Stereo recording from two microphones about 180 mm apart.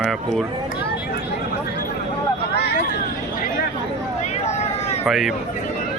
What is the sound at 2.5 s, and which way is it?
Vehicle, 65° left (ahead or behind).